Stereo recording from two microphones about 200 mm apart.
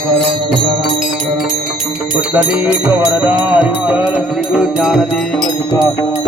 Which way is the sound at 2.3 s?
5° right (ahead or behind).